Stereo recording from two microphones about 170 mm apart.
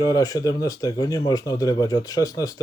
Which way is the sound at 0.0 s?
20° left (ahead or behind).